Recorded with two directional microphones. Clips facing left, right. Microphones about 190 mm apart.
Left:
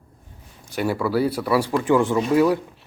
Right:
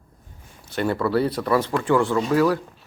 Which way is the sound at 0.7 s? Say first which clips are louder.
Even; 5° left (ahead or behind).